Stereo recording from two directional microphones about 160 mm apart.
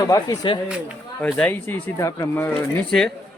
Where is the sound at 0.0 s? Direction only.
20° left (ahead or behind).